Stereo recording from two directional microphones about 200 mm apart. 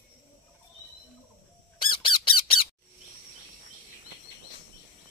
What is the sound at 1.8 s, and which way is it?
Squawk, 25° left (ahead or behind).